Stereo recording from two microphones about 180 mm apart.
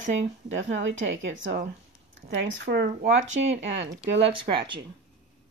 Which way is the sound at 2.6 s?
65° right (ahead or behind).